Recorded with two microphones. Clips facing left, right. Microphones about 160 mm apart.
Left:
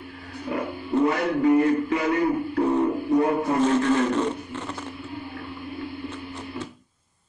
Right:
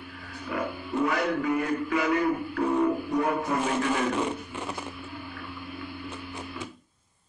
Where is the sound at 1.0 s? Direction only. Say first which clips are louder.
Left 5 dB; 30° left (ahead or behind).